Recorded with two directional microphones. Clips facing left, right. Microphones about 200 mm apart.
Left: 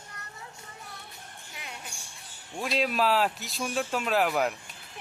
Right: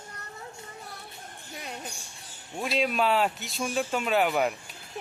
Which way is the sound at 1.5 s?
40° right (ahead or behind).